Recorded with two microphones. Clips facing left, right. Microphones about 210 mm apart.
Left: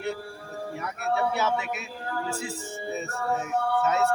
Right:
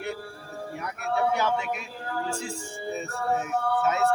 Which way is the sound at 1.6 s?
50° right (ahead or behind).